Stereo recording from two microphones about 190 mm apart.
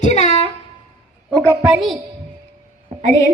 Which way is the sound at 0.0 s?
35° left (ahead or behind).